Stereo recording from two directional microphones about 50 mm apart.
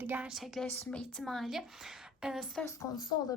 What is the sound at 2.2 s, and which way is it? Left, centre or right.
Speech, centre.